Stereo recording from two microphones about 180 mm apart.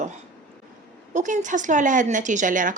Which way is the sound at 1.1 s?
45° right (ahead or behind).